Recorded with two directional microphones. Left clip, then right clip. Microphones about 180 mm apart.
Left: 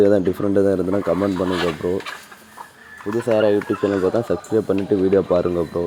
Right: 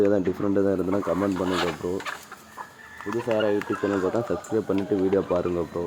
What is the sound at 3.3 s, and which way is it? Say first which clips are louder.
Speech: left 7 dB; 25° left (ahead or behind).